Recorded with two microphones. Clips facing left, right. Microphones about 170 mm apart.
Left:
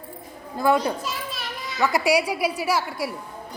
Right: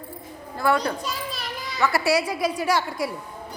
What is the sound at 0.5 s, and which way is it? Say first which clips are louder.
Speech: left 2 dB; 20° left (ahead or behind).